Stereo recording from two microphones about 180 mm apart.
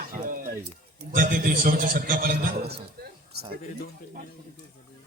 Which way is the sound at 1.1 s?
50° right (ahead or behind).